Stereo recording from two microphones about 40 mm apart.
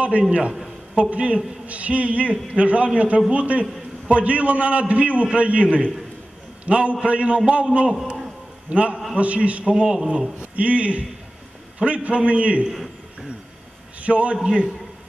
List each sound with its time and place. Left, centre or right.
0.3 s a man's voice: right
8.1 s a sound: right
9.1 s a man's voice: right
9.8 s a man's voice: right
10.5 s a man's voice: right
12.7 s a sound: centre
14.0 s a man's voice: right